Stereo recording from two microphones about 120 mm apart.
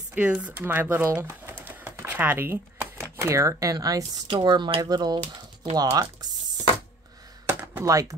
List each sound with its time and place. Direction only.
0.1 s speech: 10° right (ahead or behind); by 4.8 s 45° right (ahead or behind)
4.8 s speech: 35° right (ahead or behind)
7.4 s computer keyboard: 25° right (ahead or behind)